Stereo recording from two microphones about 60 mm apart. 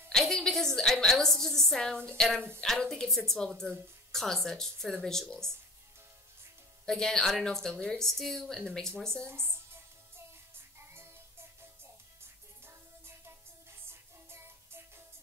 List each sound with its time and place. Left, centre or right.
0.1 s a sound: centre
0.7 s a woman's voice: centre
6.9 s a woman's voice: centre
9.3 s music: right
12.6 s music: right